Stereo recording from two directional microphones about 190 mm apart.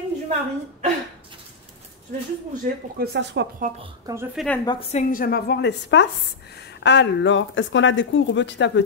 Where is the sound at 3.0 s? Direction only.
60° right (ahead or behind).